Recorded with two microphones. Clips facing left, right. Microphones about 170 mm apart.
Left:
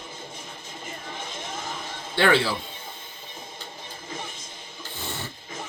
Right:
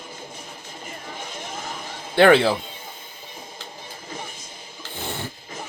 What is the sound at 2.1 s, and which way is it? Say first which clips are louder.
Speech: right 7 dB; 55° right (ahead or behind).